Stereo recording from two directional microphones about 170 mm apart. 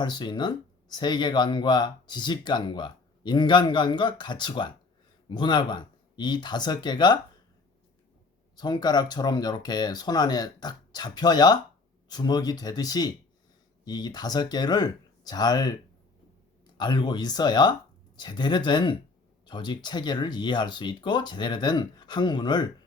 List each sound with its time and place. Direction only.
0.0 s speech: 25° left (ahead or behind)
8.5 s speech: 25° left (ahead or behind)
16.7 s speech: 25° left (ahead or behind)